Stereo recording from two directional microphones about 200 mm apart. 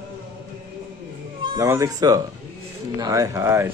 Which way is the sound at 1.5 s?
15° right (ahead or behind).